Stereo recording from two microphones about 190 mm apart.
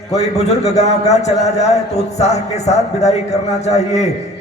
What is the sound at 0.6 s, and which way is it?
A man's voice, 35° left (ahead or behind).